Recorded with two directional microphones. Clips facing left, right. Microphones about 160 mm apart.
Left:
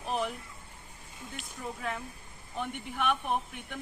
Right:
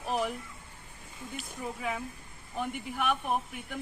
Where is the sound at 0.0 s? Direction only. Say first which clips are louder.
Right 1 dB; 5° right (ahead or behind).